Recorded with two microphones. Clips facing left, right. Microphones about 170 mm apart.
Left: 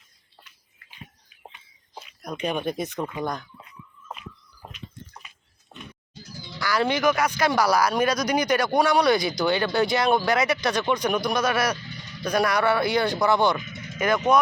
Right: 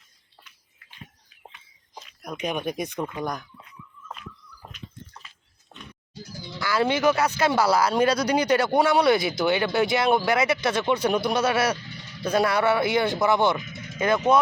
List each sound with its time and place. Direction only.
1.5 s a sound: 5° left (ahead or behind)
2.2 s speech: 10° right (ahead or behind)
4.7 s bathtub: 10° left (ahead or behind)
6.6 s speech: 20° right (ahead or behind)